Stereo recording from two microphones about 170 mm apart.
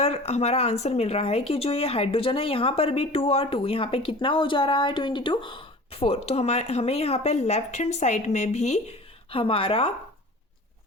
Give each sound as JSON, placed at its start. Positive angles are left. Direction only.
{"t": 0.0, "sound": "speech", "side_deg": 40}
{"t": 9.3, "sound": "speech", "side_deg": 30}